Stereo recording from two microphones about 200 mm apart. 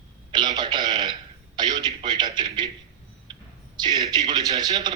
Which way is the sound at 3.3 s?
20° right (ahead or behind).